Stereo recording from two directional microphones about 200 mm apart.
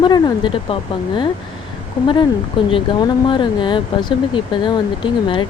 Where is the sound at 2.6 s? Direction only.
25° left (ahead or behind).